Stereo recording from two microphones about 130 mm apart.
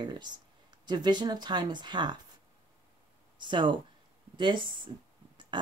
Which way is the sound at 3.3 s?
35° right (ahead or behind).